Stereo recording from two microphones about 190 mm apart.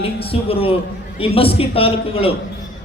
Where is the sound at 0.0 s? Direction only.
30° left (ahead or behind).